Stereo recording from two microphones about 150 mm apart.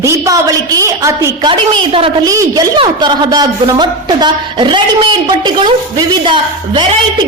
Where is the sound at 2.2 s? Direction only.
25° right (ahead or behind).